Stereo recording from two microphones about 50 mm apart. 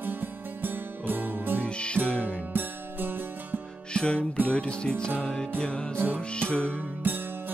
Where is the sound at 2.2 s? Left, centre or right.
Right.